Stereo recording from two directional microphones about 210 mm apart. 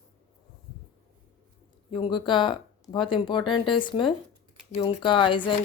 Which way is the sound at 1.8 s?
20° left (ahead or behind).